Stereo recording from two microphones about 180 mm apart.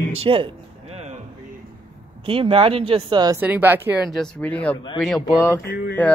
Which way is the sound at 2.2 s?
30° right (ahead or behind).